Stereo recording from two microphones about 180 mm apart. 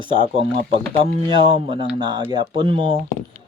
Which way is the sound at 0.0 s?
25° right (ahead or behind).